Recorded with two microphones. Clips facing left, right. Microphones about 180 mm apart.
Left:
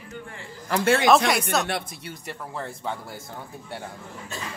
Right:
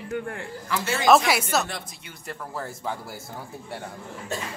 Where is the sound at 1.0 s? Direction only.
Centre (ahead or behind).